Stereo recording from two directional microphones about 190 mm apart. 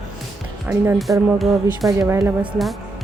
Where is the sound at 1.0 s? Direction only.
Centre (ahead or behind).